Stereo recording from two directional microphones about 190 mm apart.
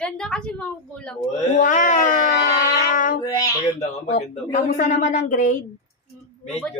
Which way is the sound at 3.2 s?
20° left (ahead or behind).